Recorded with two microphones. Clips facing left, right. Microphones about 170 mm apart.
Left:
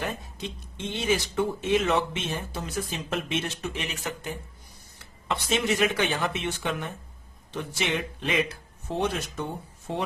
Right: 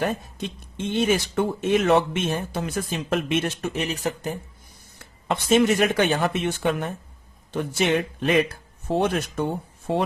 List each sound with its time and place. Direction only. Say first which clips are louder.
0.0 s speech: right 6 dB; 50° right (ahead or behind)
3.8 s speech: right 7 dB; 35° right (ahead or behind)
4.9 s speech: right 4 dB; 50° right (ahead or behind)